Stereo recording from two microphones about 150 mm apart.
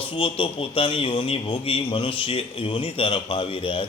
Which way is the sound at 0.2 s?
35° left (ahead or behind).